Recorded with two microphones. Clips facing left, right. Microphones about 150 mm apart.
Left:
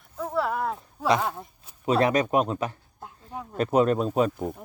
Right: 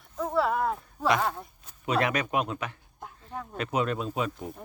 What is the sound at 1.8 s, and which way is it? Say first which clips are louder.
Speech: left 5 dB; 35° left (ahead or behind).